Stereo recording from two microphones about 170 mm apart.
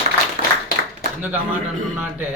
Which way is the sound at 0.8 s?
90° right.